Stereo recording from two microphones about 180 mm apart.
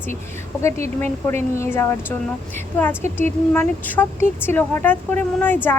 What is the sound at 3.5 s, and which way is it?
Speech, 10° left (ahead or behind).